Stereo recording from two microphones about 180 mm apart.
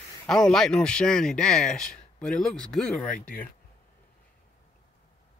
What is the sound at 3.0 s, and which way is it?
Speech, 45° left (ahead or behind).